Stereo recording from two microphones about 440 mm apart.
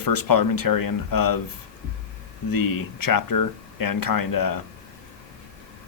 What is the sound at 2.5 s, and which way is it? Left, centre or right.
Speech, left.